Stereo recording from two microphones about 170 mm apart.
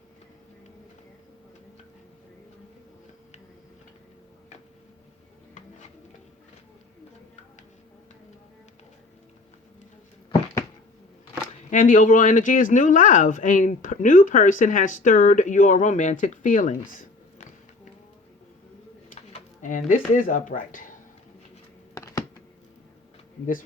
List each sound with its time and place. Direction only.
11.7 s speech: 50° left (ahead or behind)
19.3 s a sound: 50° left (ahead or behind)
20.1 s speech: 50° left (ahead or behind)
21.9 s computer keyboard: 20° left (ahead or behind)